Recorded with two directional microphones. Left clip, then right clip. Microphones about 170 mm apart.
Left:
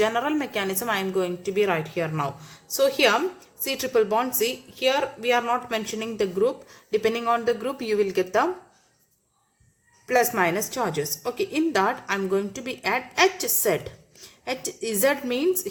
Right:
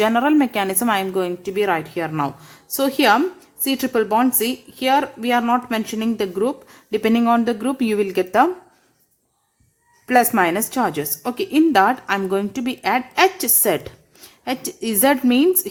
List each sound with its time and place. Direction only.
0.0 s a woman's voice: 50° right (ahead or behind)
10.1 s a woman's voice: 45° right (ahead or behind)